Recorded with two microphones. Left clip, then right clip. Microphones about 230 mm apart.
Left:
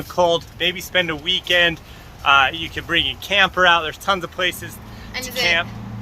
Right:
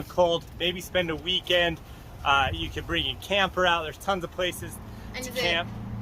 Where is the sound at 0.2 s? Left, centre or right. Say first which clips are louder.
Left 6 dB; centre.